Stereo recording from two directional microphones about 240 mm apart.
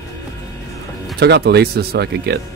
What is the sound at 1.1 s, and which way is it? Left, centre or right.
Speech, right.